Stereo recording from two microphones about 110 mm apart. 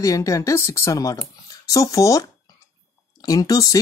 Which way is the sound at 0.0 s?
30° left (ahead or behind).